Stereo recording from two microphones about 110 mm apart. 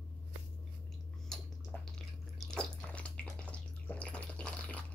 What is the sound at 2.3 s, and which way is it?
Bathtub, 10° left (ahead or behind).